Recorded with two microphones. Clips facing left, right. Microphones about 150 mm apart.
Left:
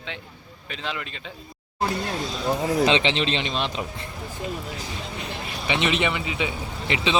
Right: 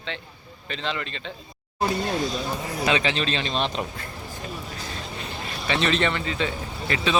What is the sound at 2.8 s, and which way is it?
Speech, 25° left (ahead or behind).